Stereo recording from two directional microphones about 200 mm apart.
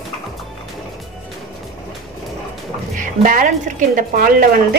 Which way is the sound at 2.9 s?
40° right (ahead or behind).